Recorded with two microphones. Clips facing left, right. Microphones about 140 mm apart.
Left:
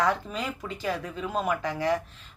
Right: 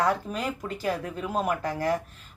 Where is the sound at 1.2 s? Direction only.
10° right (ahead or behind).